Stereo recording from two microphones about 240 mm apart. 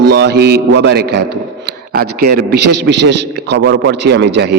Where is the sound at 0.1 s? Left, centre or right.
Right.